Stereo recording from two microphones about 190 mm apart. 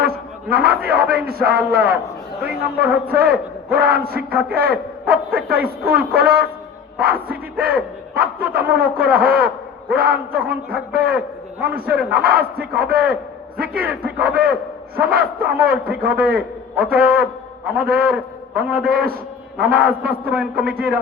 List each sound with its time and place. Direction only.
0.5 s a man's voice: 55° right (ahead or behind)
2.4 s a man's voice: 10° right (ahead or behind)
3.1 s a man's voice: 55° right (ahead or behind)